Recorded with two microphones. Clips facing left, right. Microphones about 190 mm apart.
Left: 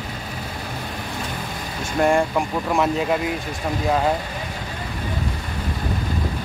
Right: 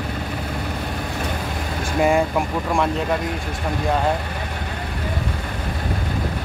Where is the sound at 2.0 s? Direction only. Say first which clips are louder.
Even; 5° right (ahead or behind).